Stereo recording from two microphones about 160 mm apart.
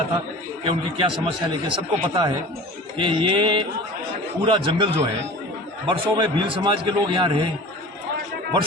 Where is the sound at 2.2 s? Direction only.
30° right (ahead or behind).